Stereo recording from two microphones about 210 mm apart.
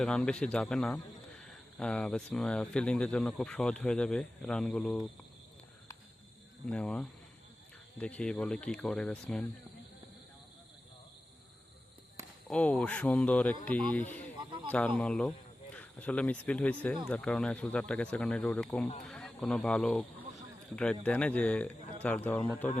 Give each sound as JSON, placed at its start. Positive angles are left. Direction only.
{"t": 0.0, "sound": "speech", "side_deg": 5}
{"t": 6.7, "sound": "speech", "side_deg": 5}
{"t": 12.5, "sound": "a man's voice", "side_deg": 5}
{"t": 14.3, "sound": "a sound", "side_deg": -20}
{"t": 14.7, "sound": "a man's voice", "side_deg": 5}